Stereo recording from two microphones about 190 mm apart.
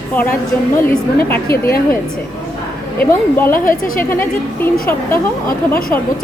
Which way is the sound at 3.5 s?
45° left (ahead or behind).